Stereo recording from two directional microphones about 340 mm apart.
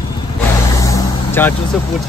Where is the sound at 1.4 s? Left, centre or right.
Centre.